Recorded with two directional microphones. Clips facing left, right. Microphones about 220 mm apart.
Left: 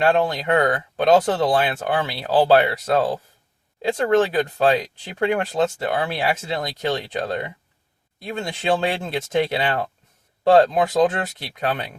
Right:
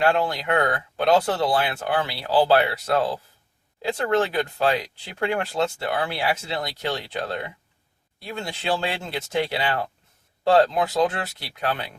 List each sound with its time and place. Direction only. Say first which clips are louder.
0.0 s speech: left 3 dB; 25° left (ahead or behind)